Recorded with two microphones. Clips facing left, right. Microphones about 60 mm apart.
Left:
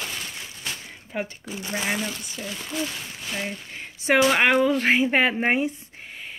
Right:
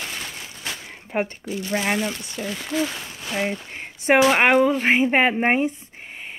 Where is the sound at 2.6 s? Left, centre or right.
Right.